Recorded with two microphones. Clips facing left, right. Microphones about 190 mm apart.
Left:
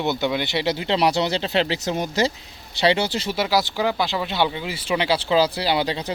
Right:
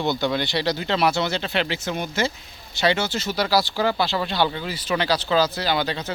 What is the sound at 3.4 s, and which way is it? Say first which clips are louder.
Speech: right 1 dB; 20° left (ahead or behind).